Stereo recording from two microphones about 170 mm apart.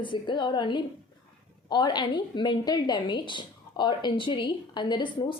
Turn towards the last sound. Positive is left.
turn(degrees=30)  # may be behind; listen again after turning